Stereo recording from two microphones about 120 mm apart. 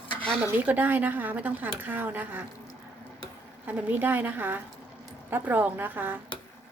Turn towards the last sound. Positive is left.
turn(degrees=-15)  # may be behind; listen again after turning